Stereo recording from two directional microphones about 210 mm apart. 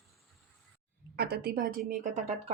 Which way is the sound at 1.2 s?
45° right (ahead or behind).